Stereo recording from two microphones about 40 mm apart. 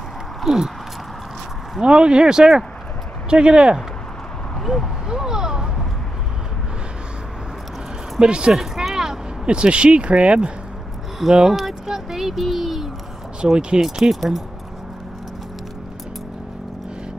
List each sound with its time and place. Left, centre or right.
0.4 s a sound: centre
1.8 s speech: right
5.0 s a sound: centre
8.2 s speech: right
8.7 s a sound: centre
9.5 s speech: right
11.3 s speech: centre
13.4 s speech: right
13.7 s speech: centre